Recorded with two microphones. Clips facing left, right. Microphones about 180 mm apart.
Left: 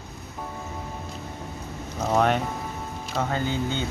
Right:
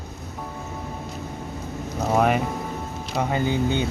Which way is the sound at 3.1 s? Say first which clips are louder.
Right 3 dB; 15° right (ahead or behind).